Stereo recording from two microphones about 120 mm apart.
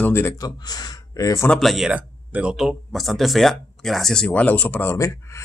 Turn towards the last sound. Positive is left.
turn(degrees=25)  # may be behind; listen again after turning